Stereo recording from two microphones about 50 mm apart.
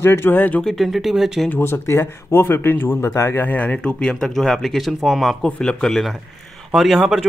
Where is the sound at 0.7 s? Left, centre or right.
Centre.